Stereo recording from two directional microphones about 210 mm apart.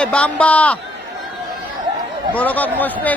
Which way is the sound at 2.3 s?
5° left (ahead or behind).